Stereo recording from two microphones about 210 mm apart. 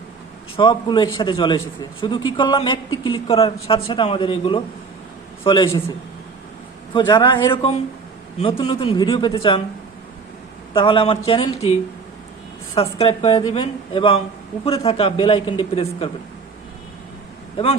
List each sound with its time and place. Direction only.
0.5 s a man's voice: 20° left (ahead or behind)
6.9 s speech: 20° left (ahead or behind)
10.8 s speech: 25° left (ahead or behind)
12.7 s speech: 25° left (ahead or behind)